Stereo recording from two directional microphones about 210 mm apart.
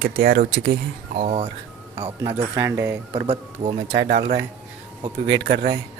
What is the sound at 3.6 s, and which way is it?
Speech, 30° right (ahead or behind).